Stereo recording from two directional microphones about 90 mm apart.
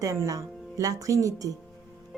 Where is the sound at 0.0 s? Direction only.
40° right (ahead or behind).